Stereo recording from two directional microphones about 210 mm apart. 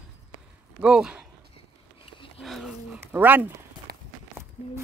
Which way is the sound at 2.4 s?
Centre (ahead or behind).